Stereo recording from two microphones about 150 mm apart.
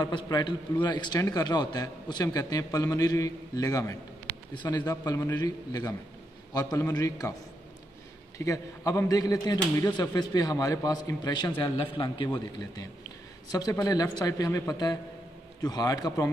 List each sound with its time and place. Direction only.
0.0 s a man's voice: 25° left (ahead or behind)
8.4 s a man's voice: 20° left (ahead or behind)